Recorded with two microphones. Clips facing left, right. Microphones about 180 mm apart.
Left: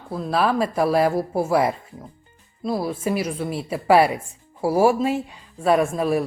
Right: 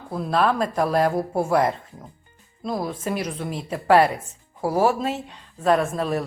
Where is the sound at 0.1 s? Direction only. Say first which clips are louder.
Even; centre (ahead or behind).